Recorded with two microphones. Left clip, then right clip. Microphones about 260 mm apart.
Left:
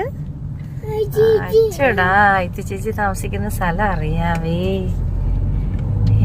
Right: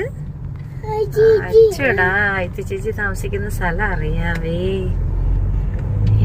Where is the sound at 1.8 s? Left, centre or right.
Centre.